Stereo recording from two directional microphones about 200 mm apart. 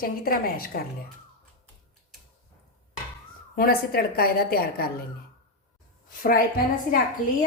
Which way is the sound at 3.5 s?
45° left (ahead or behind).